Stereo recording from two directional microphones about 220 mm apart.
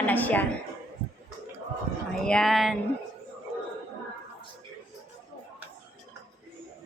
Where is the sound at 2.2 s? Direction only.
Centre (ahead or behind).